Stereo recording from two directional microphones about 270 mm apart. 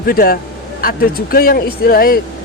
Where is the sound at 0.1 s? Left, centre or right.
Left.